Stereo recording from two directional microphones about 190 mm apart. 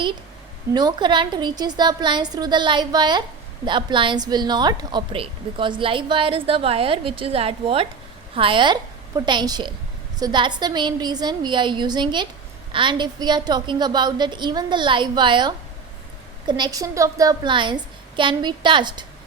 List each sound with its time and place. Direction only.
0.7 s a woman's voice: 20° right (ahead or behind)